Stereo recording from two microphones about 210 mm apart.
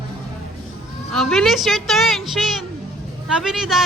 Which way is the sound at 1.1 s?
Centre (ahead or behind).